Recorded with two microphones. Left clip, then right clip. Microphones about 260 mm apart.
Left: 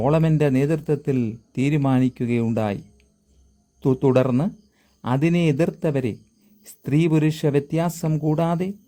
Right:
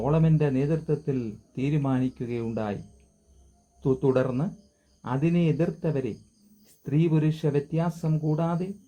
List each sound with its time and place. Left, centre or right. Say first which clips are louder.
0.0 s a man's voice: left 6 dB; left
3.8 s a man's voice: left 5 dB; left